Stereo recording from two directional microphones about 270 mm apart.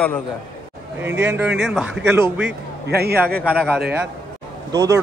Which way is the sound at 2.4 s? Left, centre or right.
Right.